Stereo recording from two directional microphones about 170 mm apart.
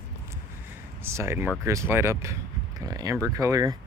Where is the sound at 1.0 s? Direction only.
15° right (ahead or behind).